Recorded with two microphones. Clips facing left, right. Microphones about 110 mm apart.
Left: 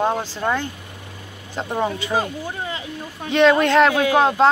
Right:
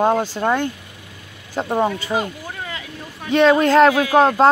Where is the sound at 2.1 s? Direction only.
30° left (ahead or behind).